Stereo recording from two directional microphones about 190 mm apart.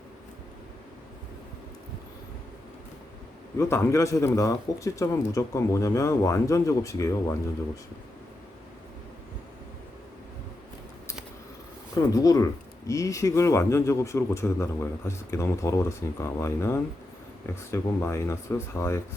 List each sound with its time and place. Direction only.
3.6 s a man's voice: 15° left (ahead or behind)
12.1 s a man's voice: 20° left (ahead or behind)